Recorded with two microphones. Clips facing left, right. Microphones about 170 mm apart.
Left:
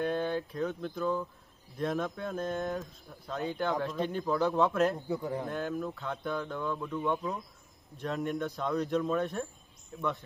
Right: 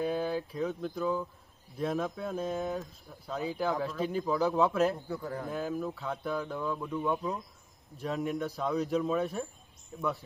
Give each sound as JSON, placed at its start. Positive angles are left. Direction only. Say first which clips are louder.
{"t": 0.0, "sound": "speech", "louder": "even", "side_deg": -5}
{"t": 5.0, "sound": "a man's voice", "louder": "left 3 dB", "side_deg": 20}
{"t": 5.5, "sound": "speech", "louder": "even", "side_deg": 0}